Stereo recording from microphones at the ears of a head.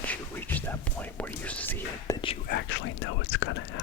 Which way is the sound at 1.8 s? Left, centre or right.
Left.